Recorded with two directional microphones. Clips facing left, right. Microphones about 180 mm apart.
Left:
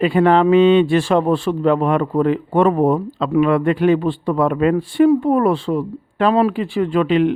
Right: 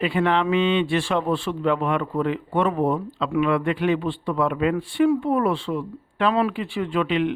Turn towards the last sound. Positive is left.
turn(degrees=40)  # may be behind; listen again after turning